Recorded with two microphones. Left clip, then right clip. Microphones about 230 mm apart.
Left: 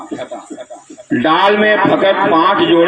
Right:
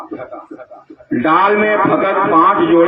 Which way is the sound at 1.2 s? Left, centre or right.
Left.